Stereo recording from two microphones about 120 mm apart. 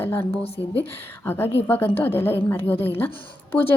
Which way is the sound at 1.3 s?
20° left (ahead or behind).